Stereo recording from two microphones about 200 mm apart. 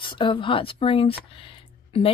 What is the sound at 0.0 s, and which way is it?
Speech, 25° left (ahead or behind).